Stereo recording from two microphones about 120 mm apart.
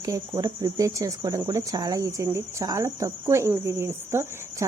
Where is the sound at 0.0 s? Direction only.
30° right (ahead or behind).